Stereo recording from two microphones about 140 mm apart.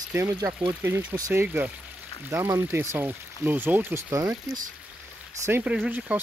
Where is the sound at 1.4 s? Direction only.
10° right (ahead or behind).